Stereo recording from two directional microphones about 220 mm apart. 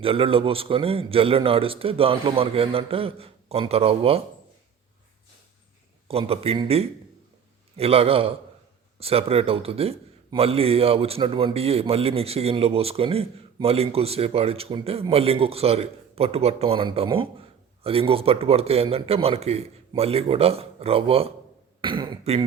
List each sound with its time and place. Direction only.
0.0 s a man's voice: 25° right (ahead or behind)
6.1 s a man's voice: 25° right (ahead or behind)
21.8 s throat clearing: 20° right (ahead or behind)